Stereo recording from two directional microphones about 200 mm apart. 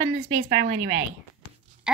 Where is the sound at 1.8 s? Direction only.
5° right (ahead or behind).